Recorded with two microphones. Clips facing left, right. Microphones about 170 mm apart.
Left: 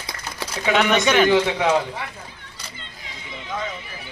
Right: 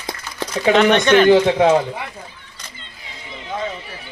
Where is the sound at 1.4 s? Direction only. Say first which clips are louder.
Right 7 dB; 45° right (ahead or behind).